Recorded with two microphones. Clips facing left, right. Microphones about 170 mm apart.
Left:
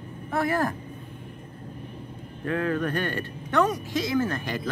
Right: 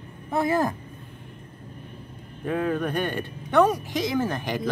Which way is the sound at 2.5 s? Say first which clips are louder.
Right 1 dB; 15° right (ahead or behind).